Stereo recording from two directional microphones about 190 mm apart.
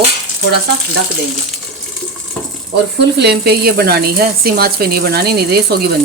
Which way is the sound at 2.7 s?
60° right (ahead or behind).